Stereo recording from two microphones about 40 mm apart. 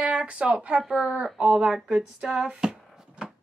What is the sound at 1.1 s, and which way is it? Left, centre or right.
Speech, right.